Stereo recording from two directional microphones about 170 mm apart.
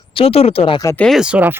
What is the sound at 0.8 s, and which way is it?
Speech, 10° left (ahead or behind).